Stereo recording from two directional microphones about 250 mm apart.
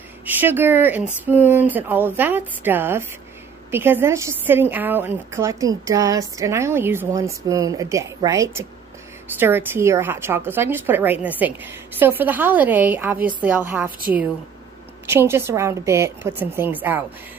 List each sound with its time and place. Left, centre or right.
0.2 s a woman's voice: centre
15.0 s a woman's voice: centre